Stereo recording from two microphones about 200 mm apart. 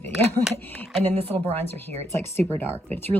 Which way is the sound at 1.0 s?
30° right (ahead or behind).